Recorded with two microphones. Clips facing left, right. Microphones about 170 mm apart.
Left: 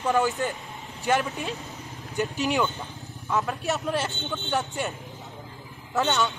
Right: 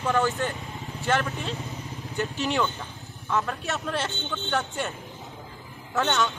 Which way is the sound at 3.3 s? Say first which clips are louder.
Left 2 dB; centre (ahead or behind).